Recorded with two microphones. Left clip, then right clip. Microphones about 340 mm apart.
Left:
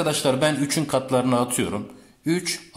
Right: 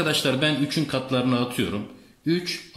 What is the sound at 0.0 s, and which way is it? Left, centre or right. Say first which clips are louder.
Speech: left 2 dB; centre.